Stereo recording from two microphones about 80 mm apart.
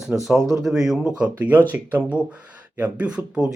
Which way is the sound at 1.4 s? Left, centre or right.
Right.